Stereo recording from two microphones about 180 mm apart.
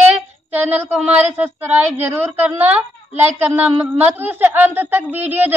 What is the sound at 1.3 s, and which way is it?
A woman's voice, 15° right (ahead or behind).